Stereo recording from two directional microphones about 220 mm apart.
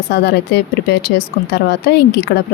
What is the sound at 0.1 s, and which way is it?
A woman's voice, 50° left (ahead or behind).